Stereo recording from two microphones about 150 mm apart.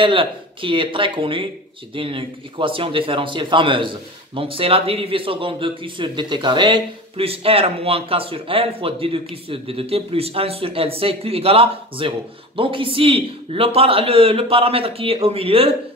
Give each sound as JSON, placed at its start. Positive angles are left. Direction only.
{"t": 0.0, "sound": "a man's voice", "side_deg": -35}